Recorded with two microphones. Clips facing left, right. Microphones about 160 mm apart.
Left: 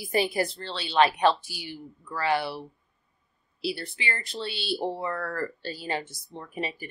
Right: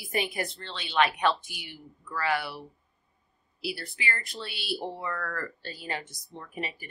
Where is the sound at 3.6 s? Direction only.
25° left (ahead or behind).